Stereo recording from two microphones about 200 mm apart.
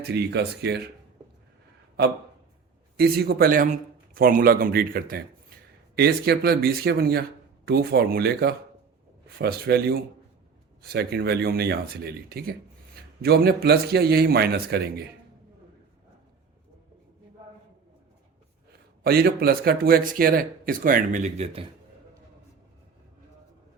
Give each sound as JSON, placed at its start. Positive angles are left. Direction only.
{"t": 0.0, "sound": "speech", "side_deg": -55}
{"t": 3.0, "sound": "speech", "side_deg": -50}
{"t": 19.0, "sound": "speech", "side_deg": -50}